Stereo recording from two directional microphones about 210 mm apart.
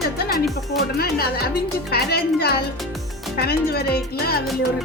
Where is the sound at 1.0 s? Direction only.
45° left (ahead or behind).